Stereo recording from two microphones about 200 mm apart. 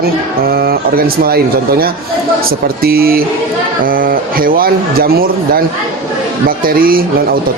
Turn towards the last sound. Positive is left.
turn(degrees=-45)  # may be behind; listen again after turning